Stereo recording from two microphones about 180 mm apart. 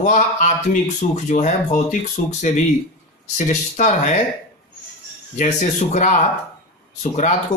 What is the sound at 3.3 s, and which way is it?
Speech, 45° left (ahead or behind).